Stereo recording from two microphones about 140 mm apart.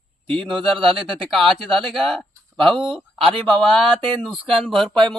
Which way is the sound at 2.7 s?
35° right (ahead or behind).